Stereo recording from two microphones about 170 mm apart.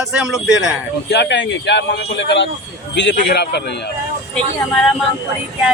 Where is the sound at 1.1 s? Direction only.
90° left.